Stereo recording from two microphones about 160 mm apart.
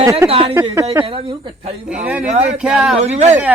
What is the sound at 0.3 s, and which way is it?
Speech, 35° right (ahead or behind).